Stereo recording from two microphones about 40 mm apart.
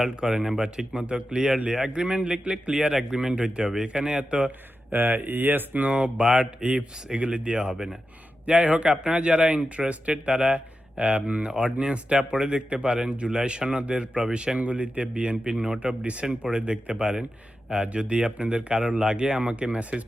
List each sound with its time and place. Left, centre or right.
0.2 s speech: centre
4.9 s speech: right
5.9 s speech: right
16.0 s speech: right